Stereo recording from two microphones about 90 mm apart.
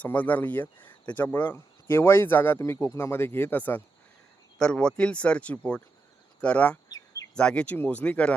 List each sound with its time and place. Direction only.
0.0 s speech: 20° left (ahead or behind)
4.5 s speech: 10° left (ahead or behind)